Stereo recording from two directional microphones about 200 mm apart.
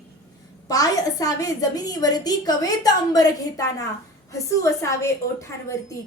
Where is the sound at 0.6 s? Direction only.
20° left (ahead or behind).